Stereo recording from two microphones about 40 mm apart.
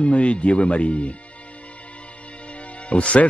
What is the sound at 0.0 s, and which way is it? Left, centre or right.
Speech, left.